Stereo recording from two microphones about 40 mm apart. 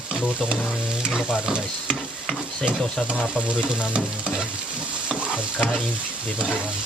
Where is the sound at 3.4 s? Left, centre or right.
Right.